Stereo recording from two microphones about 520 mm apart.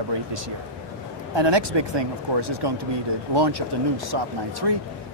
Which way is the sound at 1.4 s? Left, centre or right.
Right.